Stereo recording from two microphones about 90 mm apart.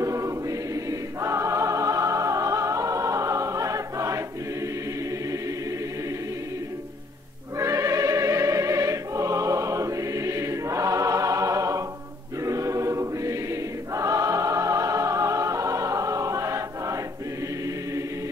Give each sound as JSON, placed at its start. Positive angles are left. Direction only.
{"t": 0.0, "sound": "choir", "side_deg": -35}
{"t": 7.5, "sound": "music", "side_deg": -35}
{"t": 12.4, "sound": "choir", "side_deg": -35}